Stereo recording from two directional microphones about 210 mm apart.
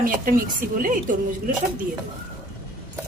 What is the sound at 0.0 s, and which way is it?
Speech, 40° right (ahead or behind).